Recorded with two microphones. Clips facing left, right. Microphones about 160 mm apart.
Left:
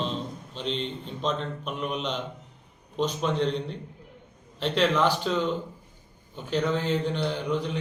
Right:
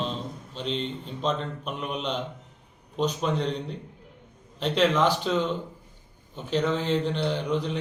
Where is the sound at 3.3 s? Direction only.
35° right (ahead or behind).